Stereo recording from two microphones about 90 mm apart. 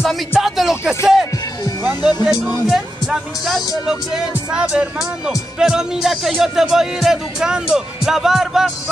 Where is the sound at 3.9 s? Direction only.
10° right (ahead or behind).